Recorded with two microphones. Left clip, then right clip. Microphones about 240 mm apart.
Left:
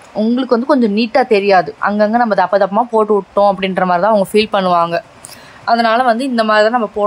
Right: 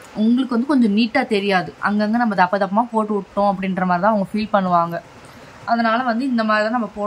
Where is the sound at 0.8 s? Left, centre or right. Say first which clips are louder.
Left 6 dB; left.